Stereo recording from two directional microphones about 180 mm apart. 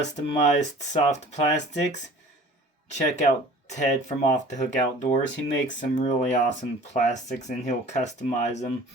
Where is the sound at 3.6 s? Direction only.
40° left (ahead or behind).